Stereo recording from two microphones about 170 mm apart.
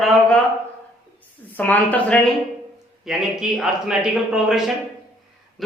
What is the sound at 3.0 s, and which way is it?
A man's voice, centre (ahead or behind).